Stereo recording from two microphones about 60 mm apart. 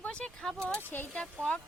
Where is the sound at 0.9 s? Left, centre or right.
Left.